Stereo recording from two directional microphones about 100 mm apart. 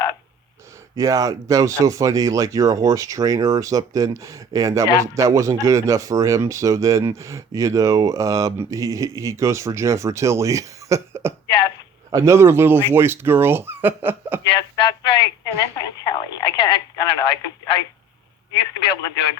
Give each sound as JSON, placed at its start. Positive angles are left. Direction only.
{"t": 0.9, "sound": "speech", "side_deg": -35}
{"t": 11.4, "sound": "a sound", "side_deg": 40}
{"t": 12.1, "sound": "speech", "side_deg": -30}
{"t": 14.8, "sound": "speech", "side_deg": 45}